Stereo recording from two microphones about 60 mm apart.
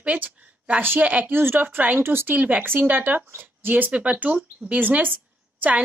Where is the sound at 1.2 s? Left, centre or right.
Right.